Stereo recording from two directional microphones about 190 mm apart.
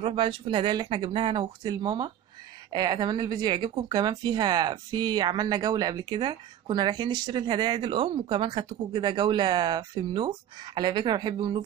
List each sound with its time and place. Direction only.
0.0 s a woman's voice: 30° right (ahead or behind)